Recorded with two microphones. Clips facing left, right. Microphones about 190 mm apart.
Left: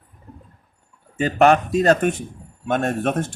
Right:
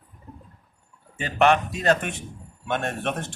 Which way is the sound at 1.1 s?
40° left (ahead or behind).